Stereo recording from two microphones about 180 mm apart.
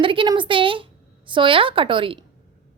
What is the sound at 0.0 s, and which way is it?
Speech, 30° right (ahead or behind).